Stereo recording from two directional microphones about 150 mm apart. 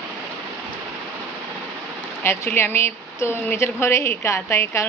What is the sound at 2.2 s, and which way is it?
A woman's voice, 15° left (ahead or behind).